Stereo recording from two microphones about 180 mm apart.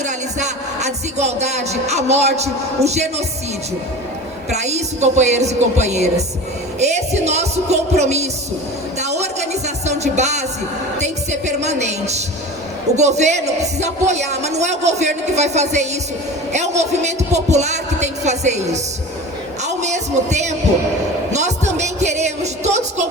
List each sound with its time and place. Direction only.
0.0 s speech: 40° right (ahead or behind)
4.6 s speech: 40° right (ahead or behind)
9.0 s music: 40° right (ahead or behind)
11.3 s speech: 40° right (ahead or behind)
19.6 s heart murmur: 40° right (ahead or behind)
21.3 s music: 40° right (ahead or behind)